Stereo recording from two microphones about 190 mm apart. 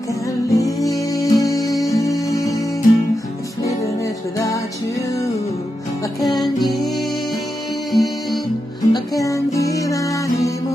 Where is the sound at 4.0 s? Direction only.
15° left (ahead or behind).